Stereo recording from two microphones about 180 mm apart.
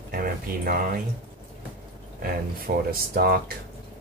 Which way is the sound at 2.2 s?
55° right (ahead or behind).